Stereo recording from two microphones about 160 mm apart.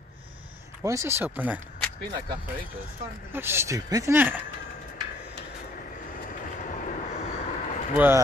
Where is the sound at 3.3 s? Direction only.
15° right (ahead or behind).